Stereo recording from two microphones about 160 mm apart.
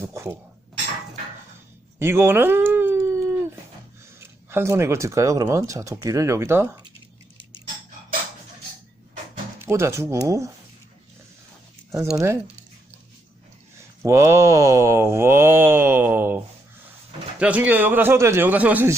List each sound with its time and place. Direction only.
0.0 s mantra: 15° right (ahead or behind)
2.0 s cat: 15° right (ahead or behind)
4.2 s speech: 15° right (ahead or behind)
9.6 s mantra: 15° right (ahead or behind)
12.1 s mantra: 20° right (ahead or behind)
13.7 s mantra: 15° right (ahead or behind)
17.4 s mantra: 10° right (ahead or behind)